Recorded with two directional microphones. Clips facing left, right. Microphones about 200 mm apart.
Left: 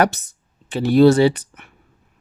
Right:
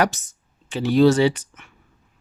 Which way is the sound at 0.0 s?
60° left (ahead or behind).